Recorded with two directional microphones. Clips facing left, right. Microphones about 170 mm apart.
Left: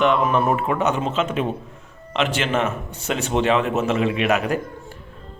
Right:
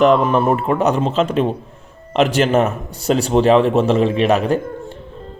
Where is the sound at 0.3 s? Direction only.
30° right (ahead or behind).